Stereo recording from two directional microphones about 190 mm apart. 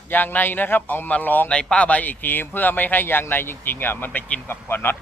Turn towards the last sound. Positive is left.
turn(degrees=10)  # may be behind; listen again after turning